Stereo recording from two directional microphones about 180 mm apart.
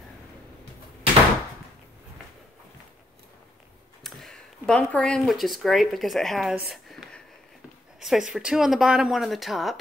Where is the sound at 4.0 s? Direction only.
Centre (ahead or behind).